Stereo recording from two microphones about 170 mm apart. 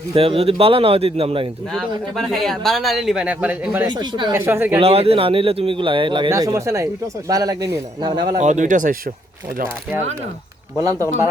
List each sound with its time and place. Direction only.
0.1 s speech: 35° right (ahead or behind)
1.7 s speech: centre (ahead or behind)
3.8 s a man's voice: 25° right (ahead or behind)
4.3 s speech: 15° right (ahead or behind)
4.8 s a man's voice: 35° right (ahead or behind)
8.4 s speech: 45° right (ahead or behind)